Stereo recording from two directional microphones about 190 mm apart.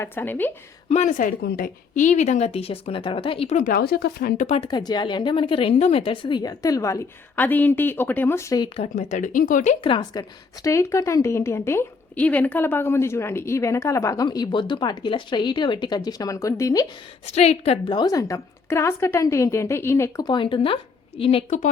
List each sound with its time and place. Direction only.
0.0 s a woman's voice: 10° left (ahead or behind)
0.9 s speech: 40° left (ahead or behind)
1.4 s speech: 55° left (ahead or behind)
4.7 s speech: 20° left (ahead or behind); by 9.7 s 45° left (ahead or behind)
9.8 s a woman's voice: 25° left (ahead or behind)
17.2 s a woman's voice: 35° left (ahead or behind)